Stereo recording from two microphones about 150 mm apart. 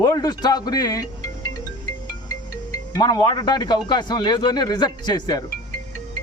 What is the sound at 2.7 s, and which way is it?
Speech, 25° left (ahead or behind).